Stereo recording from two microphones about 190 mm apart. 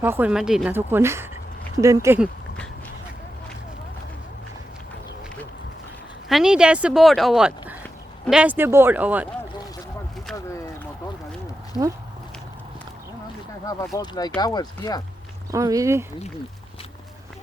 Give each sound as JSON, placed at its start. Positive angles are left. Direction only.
{"t": 0.0, "sound": "speech", "side_deg": -10}
{"t": 6.2, "sound": "speech", "side_deg": 0}
{"t": 10.3, "sound": "a sound", "side_deg": 15}
{"t": 13.7, "sound": "speech", "side_deg": 15}
{"t": 15.5, "sound": "speech", "side_deg": -15}